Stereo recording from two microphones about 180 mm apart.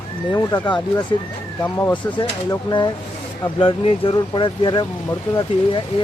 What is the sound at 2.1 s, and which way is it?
Speech, 25° left (ahead or behind).